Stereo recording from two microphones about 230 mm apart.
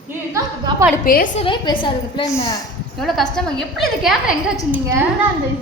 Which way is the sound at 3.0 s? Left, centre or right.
Centre.